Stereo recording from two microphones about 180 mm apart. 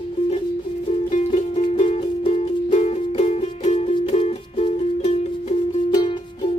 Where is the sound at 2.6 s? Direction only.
40° left (ahead or behind).